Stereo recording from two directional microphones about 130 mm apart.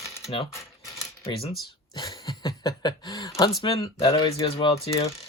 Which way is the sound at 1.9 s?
35° left (ahead or behind).